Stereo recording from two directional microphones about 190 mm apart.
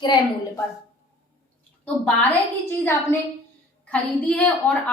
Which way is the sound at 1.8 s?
5° left (ahead or behind).